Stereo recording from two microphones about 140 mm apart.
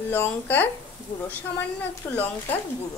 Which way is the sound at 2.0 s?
15° left (ahead or behind).